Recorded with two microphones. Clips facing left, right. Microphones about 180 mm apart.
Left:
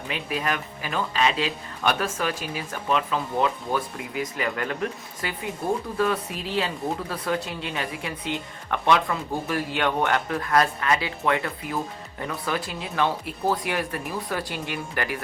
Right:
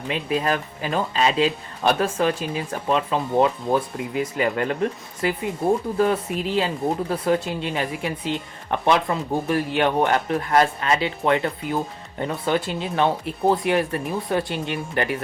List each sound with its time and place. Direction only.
0.1 s speech: 30° right (ahead or behind)